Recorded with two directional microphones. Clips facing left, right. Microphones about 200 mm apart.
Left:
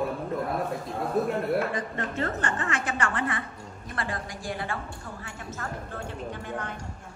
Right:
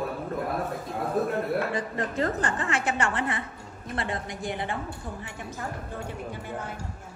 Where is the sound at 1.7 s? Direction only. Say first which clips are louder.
Right 2 dB; 35° right (ahead or behind); by 6.8 s 5° right (ahead or behind).